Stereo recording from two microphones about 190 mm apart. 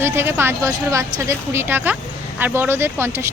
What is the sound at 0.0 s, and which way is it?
Speech, 10° right (ahead or behind).